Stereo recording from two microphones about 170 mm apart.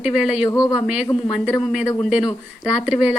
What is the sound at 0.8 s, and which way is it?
A woman's voice, 5° right (ahead or behind).